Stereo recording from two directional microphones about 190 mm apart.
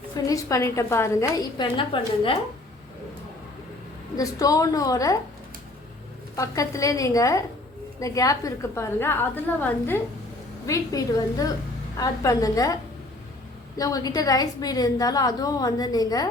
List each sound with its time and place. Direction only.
0.3 s a woman's voice: 15° left (ahead or behind)
4.2 s a woman's voice: 20° left (ahead or behind)
6.3 s a woman's voice: 15° left (ahead or behind)